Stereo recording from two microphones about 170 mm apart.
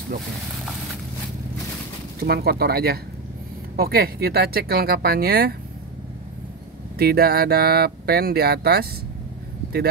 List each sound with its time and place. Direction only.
2.1 s speech: 70° right (ahead or behind)
7.0 s speech: 65° right (ahead or behind)